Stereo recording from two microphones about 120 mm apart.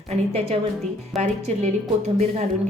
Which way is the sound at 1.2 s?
70° right (ahead or behind).